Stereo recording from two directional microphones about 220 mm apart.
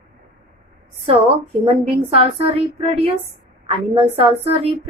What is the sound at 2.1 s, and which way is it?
A woman's voice, 25° right (ahead or behind).